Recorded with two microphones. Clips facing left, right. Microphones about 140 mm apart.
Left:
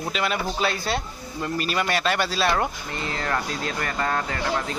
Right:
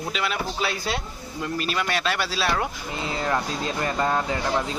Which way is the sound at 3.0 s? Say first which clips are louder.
Right 2 dB; 10° right (ahead or behind).